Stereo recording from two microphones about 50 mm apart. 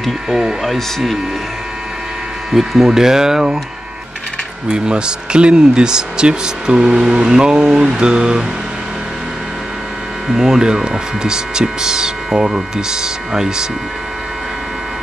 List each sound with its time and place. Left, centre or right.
0.3 s speech: centre
0.6 s speech: centre
2.5 s speech: centre
4.6 s speech: centre
10.2 s speech: centre